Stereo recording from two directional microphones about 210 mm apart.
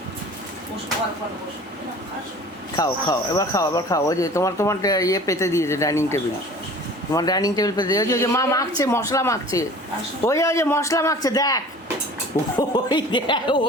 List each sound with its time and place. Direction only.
2.7 s speech: 15° left (ahead or behind)